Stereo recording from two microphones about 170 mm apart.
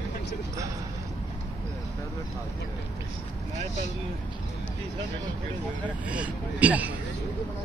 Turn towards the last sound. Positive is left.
turn(degrees=-10)  # may be behind; listen again after turning